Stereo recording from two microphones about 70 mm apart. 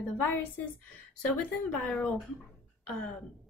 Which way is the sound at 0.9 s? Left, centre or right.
Centre.